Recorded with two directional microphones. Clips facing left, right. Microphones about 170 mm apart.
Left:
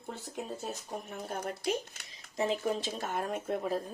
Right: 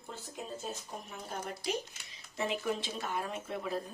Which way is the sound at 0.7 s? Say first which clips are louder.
Left 3 dB; 55° left (ahead or behind).